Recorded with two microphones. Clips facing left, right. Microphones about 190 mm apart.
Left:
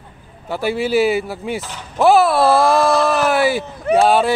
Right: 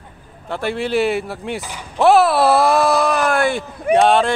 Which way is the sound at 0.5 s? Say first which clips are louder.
Left 2 dB; 5° left (ahead or behind).